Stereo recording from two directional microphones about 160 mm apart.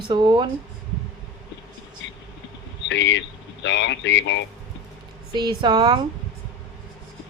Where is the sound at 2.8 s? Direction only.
90° left.